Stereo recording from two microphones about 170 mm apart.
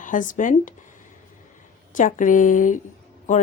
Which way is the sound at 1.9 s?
50° left (ahead or behind).